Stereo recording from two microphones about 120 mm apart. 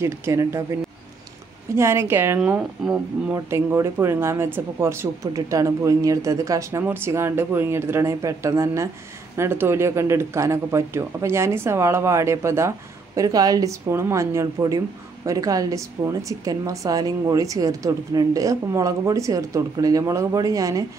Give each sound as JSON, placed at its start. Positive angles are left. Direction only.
{"t": 0.0, "sound": "a woman's voice", "side_deg": -25}
{"t": 1.8, "sound": "a woman's voice", "side_deg": -20}
{"t": 3.3, "sound": "a woman's voice", "side_deg": -25}